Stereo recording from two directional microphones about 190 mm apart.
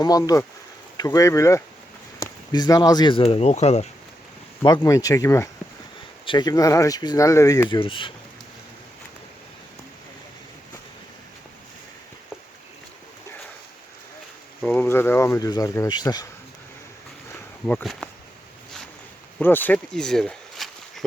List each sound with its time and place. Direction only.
0.0 s speech: 20° left (ahead or behind); by 3.8 s 35° left (ahead or behind)
4.6 s speech: 20° left (ahead or behind)
14.6 s speech: 10° left (ahead or behind)
17.7 s speech: 5° left (ahead or behind)
19.4 s speech: 10° left (ahead or behind)